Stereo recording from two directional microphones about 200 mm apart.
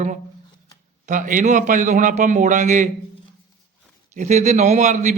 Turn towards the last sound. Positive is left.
turn(degrees=-35)  # may be behind; listen again after turning